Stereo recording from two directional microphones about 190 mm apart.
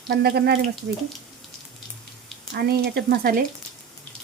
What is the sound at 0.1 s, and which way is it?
Speech, 60° right (ahead or behind).